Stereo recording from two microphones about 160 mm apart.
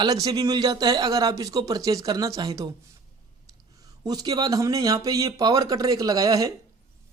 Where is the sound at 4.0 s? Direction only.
25° right (ahead or behind).